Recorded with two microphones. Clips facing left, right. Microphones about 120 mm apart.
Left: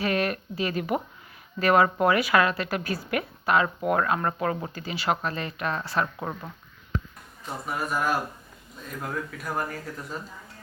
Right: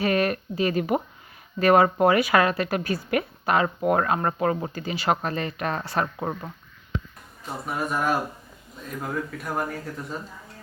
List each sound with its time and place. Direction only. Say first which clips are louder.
0.0 s a sound: right 3 dB; 40° right (ahead or behind)
0.6 s a woman's voice: right 4 dB; 40° right (ahead or behind)
4.8 s speech: right 3 dB; 40° right (ahead or behind)
7.4 s speech: right 2 dB; centre (ahead or behind)